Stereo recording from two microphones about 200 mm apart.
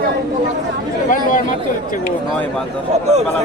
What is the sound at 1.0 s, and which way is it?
Speech, 40° left (ahead or behind).